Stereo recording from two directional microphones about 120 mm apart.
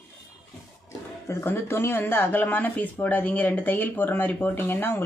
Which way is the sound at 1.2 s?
20° left (ahead or behind).